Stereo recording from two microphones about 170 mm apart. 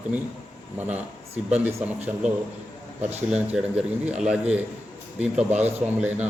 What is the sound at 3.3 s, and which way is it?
Speech, 5° right (ahead or behind).